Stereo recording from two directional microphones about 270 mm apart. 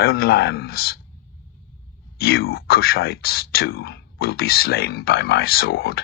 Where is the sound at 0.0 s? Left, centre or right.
Left.